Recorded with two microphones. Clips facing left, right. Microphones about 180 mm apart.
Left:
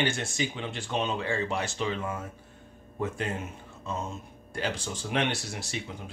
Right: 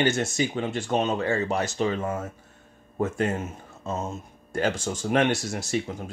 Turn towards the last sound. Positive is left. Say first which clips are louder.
# right 9 dB
turn(degrees=-45)  # may be behind; listen again after turning